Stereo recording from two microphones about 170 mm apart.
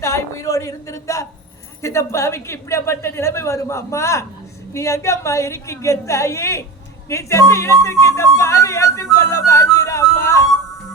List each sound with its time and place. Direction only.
0.0 s a man's voice: 15° left (ahead or behind)
9.1 s music: 15° left (ahead or behind)